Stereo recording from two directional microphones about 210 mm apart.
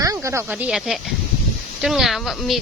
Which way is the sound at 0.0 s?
15° right (ahead or behind).